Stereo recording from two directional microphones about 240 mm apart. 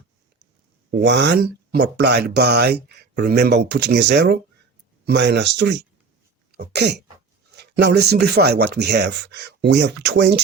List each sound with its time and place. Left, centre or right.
0.9 s speech: right